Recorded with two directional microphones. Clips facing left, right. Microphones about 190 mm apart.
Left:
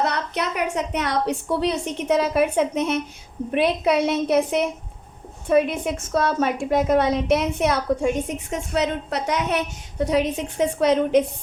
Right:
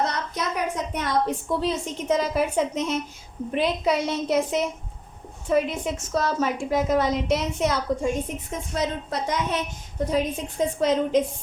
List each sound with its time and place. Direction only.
0.0 s a woman's voice: 70° left (ahead or behind)
6.1 s a woman's voice: 60° left (ahead or behind)